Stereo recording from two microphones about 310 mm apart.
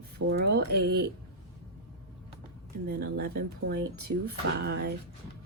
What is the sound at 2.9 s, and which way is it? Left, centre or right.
Speech, right.